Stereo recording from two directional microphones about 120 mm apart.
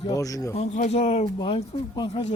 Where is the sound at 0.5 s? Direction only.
70° left (ahead or behind).